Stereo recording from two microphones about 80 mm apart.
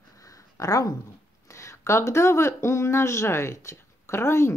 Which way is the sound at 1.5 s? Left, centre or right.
Left.